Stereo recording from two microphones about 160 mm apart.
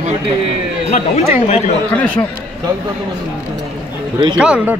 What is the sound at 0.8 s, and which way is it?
Speech, 45° left (ahead or behind).